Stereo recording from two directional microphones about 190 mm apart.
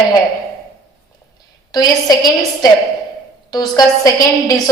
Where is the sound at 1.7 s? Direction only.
20° left (ahead or behind).